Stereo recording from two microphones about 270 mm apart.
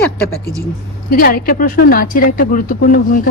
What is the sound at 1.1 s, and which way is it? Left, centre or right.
Speech, left.